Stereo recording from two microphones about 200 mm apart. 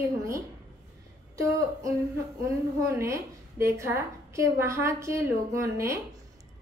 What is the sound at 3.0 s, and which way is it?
A woman's voice, 15° right (ahead or behind).